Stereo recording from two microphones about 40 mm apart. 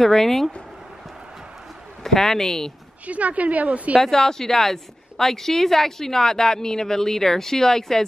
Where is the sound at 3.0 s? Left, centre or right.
Right.